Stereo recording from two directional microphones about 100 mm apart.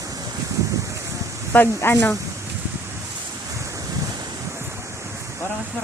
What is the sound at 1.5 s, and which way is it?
Speech, 20° left (ahead or behind).